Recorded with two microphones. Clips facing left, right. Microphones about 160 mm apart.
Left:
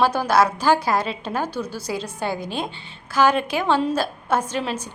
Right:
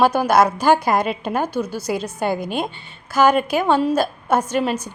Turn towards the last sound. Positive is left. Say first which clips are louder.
# right 4 dB
turn(degrees=-10)  # may be behind; listen again after turning